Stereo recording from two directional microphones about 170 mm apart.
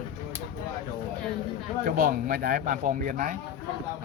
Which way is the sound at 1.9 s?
55° right (ahead or behind).